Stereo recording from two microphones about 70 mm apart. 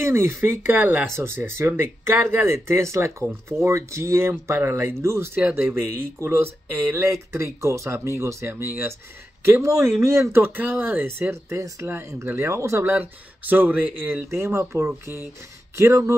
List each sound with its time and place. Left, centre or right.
0.0 s speech: right
5.3 s speech: right
12.8 s speech: right